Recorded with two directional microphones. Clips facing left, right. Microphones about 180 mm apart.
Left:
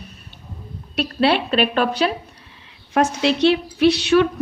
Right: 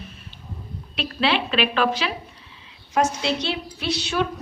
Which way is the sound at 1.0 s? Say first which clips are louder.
Left 5 dB; 45° left (ahead or behind).